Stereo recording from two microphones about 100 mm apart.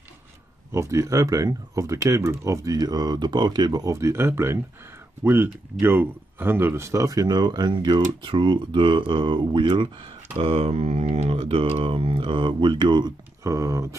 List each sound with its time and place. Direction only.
0.7 s speech: 30° right (ahead or behind); by 9.8 s 50° right (ahead or behind)
10.3 s speech: 80° right; by 13.1 s 50° right (ahead or behind)
13.4 s speech: 30° right (ahead or behind)